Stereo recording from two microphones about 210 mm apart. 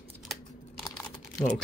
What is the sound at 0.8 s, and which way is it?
Typing, 15° left (ahead or behind).